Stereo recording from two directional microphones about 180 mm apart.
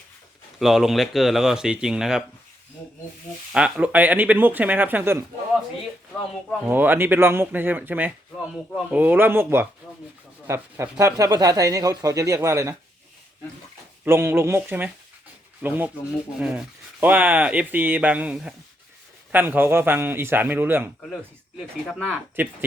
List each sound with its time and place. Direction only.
0.6 s speech: centre (ahead or behind)
3.5 s speech: 5° right (ahead or behind)
6.7 s speech: 10° right (ahead or behind)
14.0 s speech: 15° right (ahead or behind)
21.8 s speech: 5° left (ahead or behind)
22.4 s speech: 10° right (ahead or behind)